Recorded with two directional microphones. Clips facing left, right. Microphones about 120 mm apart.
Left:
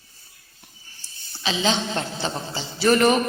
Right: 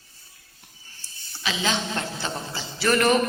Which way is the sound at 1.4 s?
25° left (ahead or behind).